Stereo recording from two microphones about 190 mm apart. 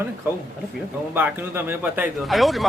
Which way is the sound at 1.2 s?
10° right (ahead or behind).